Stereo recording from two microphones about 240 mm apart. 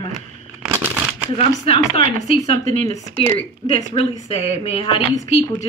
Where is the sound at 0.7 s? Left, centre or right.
Centre.